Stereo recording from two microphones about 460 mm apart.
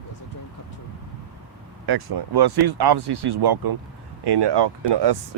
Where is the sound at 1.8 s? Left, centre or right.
Right.